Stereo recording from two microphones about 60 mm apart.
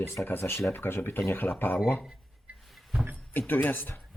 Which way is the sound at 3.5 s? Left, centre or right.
Left.